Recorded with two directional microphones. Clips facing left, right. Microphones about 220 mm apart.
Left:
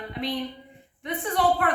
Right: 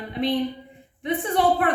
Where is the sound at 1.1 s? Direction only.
25° right (ahead or behind).